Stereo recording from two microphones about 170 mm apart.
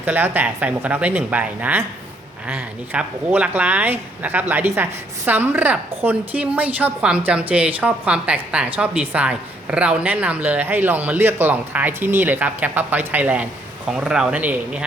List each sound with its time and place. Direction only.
0.0 s a woman's voice: 10° right (ahead or behind)